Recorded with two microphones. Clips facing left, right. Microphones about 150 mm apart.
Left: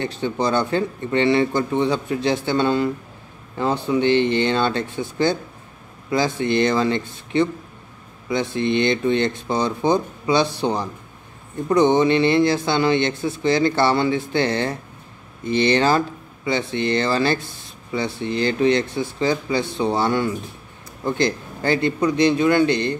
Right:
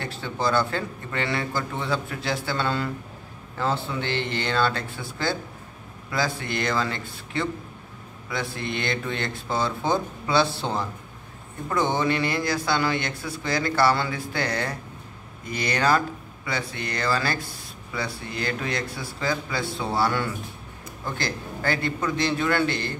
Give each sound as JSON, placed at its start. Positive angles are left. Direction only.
{"t": 0.0, "sound": "speech", "side_deg": 20}